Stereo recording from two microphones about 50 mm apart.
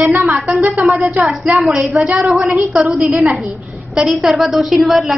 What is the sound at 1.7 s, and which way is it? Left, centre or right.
Speech, centre.